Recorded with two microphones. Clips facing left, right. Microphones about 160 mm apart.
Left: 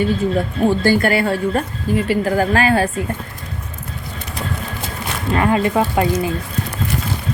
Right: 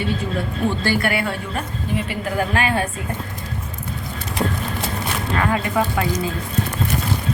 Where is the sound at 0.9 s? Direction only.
45° left (ahead or behind).